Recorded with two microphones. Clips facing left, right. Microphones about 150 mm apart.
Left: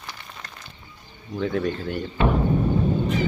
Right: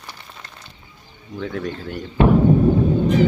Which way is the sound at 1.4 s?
5° left (ahead or behind).